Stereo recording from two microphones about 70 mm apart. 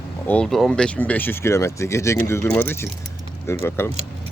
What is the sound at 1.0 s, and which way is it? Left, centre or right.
Speech, left.